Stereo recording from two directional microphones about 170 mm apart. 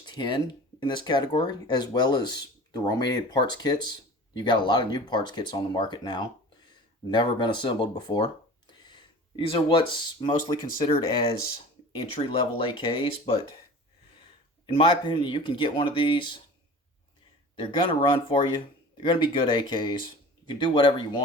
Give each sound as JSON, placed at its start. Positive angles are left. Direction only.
{"t": 0.0, "sound": "speech", "side_deg": 25}
{"t": 11.9, "sound": "speech", "side_deg": 35}
{"t": 14.7, "sound": "speech", "side_deg": 30}
{"t": 17.6, "sound": "speech", "side_deg": 30}